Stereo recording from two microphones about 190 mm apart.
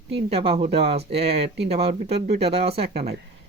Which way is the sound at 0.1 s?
30° right (ahead or behind).